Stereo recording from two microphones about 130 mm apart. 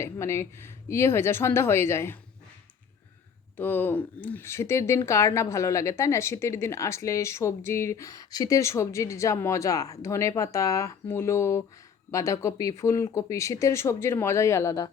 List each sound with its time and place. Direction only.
0.0 s speech: 20° left (ahead or behind)
3.6 s speech: 15° left (ahead or behind)